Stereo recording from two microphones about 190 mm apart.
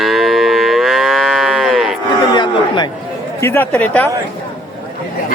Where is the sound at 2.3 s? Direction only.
25° left (ahead or behind).